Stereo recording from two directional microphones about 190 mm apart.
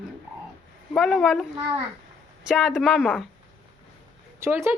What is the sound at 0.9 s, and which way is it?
Speech, centre (ahead or behind).